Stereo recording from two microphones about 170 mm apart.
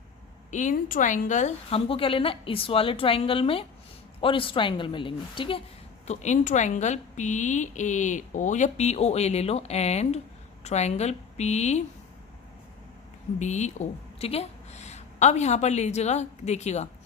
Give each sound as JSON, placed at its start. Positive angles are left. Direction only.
{"t": 0.5, "sound": "a woman's voice", "side_deg": 50}
{"t": 6.1, "sound": "a woman's voice", "side_deg": 45}
{"t": 13.4, "sound": "a woman's voice", "side_deg": 45}